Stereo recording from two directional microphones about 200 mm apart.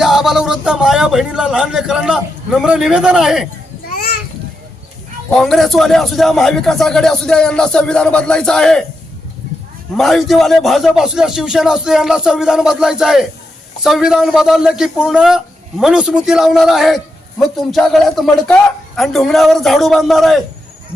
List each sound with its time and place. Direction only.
0.0 s a man's voice: centre (ahead or behind)
3.8 s children playing: 50° left (ahead or behind)
5.3 s a man's voice: centre (ahead or behind)
10.0 s a man's voice: centre (ahead or behind)